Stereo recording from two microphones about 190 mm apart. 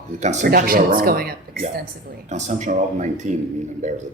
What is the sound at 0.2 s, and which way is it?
Speech, 40° right (ahead or behind).